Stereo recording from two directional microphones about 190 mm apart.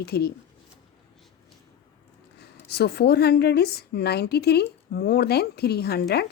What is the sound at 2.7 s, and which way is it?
A woman's voice, 60° left (ahead or behind).